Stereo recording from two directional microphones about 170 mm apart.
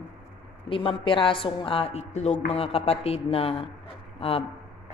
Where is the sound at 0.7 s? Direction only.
30° left (ahead or behind).